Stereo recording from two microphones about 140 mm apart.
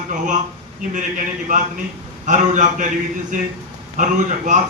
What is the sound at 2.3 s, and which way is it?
Speech, 65° right (ahead or behind).